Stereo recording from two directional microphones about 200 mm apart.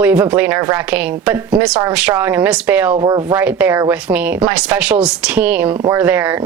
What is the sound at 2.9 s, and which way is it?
Speech, 20° right (ahead or behind).